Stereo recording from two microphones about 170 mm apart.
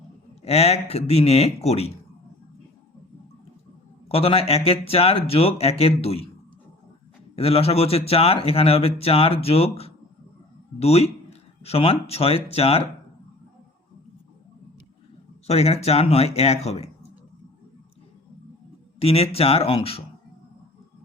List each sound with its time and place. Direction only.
0.4 s speech: 40° left (ahead or behind)
4.1 s speech: 35° left (ahead or behind)
7.3 s speech: 35° left (ahead or behind)
15.4 s speech: 40° left (ahead or behind)
18.9 s speech: 35° left (ahead or behind)